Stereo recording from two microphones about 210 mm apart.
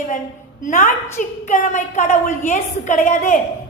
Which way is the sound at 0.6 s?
35° left (ahead or behind).